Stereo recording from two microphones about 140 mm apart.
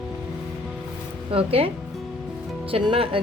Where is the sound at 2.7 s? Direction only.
40° right (ahead or behind).